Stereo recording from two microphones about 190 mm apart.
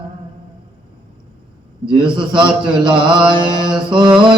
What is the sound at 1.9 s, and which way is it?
Speech, 25° right (ahead or behind).